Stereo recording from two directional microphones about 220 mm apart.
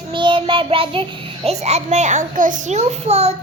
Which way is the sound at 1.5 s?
30° right (ahead or behind).